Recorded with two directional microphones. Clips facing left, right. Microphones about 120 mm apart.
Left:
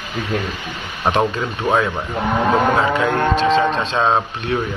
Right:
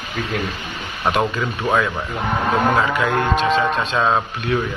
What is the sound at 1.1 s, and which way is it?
Speech, 25° left (ahead or behind).